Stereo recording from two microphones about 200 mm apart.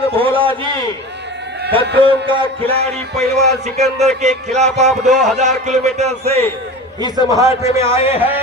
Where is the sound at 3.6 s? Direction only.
35° right (ahead or behind).